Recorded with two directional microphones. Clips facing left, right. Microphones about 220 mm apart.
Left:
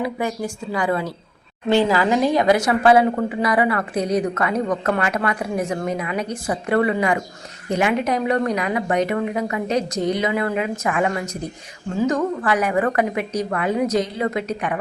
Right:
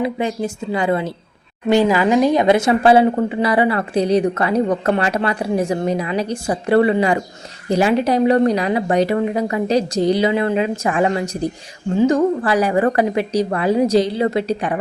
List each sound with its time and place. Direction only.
0.0 s a woman's voice: 25° right (ahead or behind)